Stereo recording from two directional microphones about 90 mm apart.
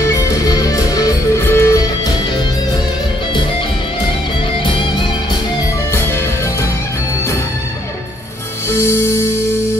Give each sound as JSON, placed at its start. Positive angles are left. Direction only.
{"t": 0.0, "sound": "music", "side_deg": 35}
{"t": 1.4, "sound": "music", "side_deg": 30}
{"t": 8.6, "sound": "music", "side_deg": 30}